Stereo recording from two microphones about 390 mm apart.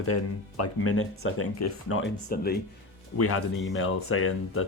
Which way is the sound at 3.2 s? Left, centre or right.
Left.